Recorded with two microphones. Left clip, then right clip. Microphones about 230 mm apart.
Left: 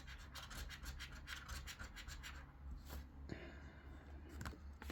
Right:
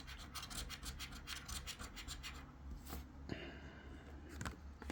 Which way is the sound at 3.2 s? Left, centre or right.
Centre.